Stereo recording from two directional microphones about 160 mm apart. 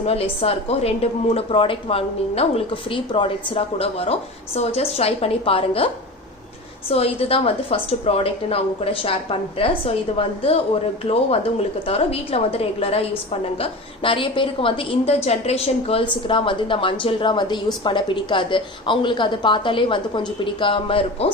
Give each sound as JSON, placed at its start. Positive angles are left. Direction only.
{"t": 0.1, "sound": "a woman's voice", "side_deg": 40}
{"t": 6.9, "sound": "a woman's voice", "side_deg": 40}